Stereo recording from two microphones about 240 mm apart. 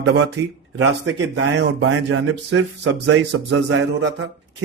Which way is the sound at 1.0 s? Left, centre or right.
Right.